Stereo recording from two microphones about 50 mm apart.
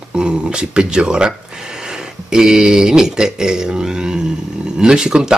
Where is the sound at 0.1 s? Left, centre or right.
Centre.